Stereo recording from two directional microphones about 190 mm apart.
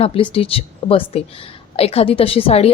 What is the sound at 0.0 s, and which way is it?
A woman's voice, 30° left (ahead or behind).